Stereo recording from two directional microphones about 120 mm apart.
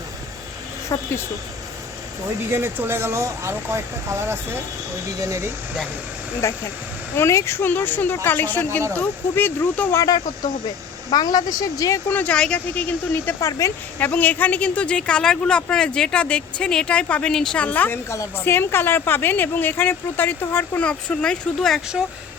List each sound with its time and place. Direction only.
0.9 s speech: 30° left (ahead or behind)
2.5 s speech: 20° right (ahead or behind)
6.4 s speech: 25° left (ahead or behind)
9.9 s speech: 30° left (ahead or behind)
12.0 s speech: 10° left (ahead or behind)
13.4 s speech: 25° left (ahead or behind)
14.0 s speech: 15° left (ahead or behind)